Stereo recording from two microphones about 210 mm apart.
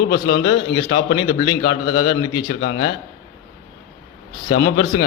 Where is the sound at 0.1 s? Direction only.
55° left (ahead or behind).